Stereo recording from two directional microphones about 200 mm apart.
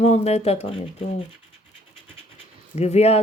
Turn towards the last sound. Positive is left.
turn(degrees=30)  # may be behind; listen again after turning